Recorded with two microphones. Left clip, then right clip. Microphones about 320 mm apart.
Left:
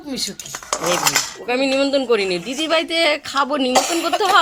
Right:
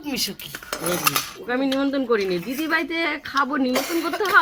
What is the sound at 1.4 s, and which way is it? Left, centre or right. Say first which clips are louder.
A man's voice: left 5 dB; centre.